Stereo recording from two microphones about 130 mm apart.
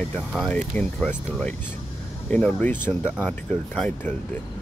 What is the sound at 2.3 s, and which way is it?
Speech, 10° left (ahead or behind).